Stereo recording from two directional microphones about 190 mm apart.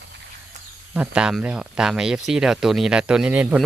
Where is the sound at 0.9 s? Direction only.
5° right (ahead or behind).